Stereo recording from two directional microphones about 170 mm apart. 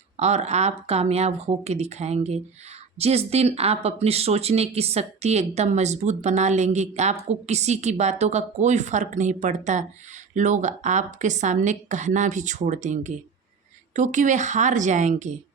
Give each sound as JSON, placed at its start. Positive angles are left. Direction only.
{"t": 0.2, "sound": "a woman's voice", "side_deg": -40}